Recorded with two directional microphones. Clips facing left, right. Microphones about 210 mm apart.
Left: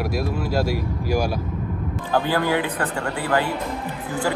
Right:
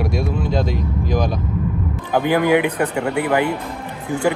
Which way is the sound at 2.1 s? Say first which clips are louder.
Right 5 dB; 15° right (ahead or behind).